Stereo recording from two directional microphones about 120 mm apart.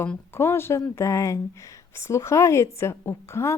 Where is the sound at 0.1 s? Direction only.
20° left (ahead or behind).